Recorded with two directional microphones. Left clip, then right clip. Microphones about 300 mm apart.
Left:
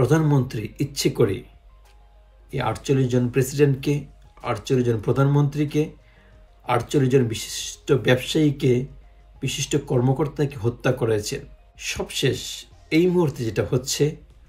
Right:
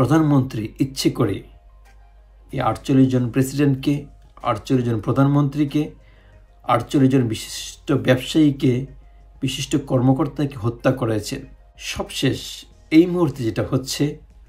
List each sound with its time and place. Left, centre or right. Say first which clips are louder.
0.0 s speech: right 3 dB; centre
2.5 s speech: right 4 dB; centre